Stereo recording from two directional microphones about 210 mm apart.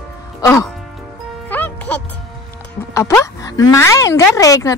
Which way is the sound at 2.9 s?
15° left (ahead or behind).